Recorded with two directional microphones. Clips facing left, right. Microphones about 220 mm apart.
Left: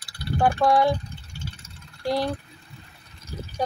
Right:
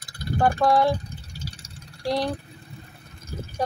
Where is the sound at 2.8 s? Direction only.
50° right (ahead or behind).